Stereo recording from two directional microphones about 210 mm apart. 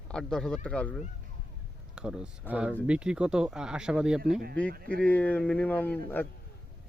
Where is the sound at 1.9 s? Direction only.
5° right (ahead or behind).